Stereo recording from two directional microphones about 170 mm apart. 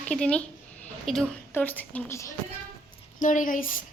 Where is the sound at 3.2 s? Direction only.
50° left (ahead or behind).